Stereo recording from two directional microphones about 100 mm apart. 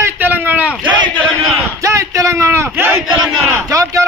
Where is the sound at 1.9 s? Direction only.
30° right (ahead or behind).